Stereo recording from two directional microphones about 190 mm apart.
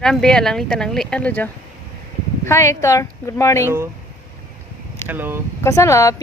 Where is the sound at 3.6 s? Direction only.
10° right (ahead or behind).